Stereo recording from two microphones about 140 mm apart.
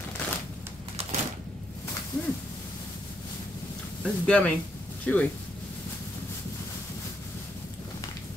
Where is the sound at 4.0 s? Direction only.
5° left (ahead or behind).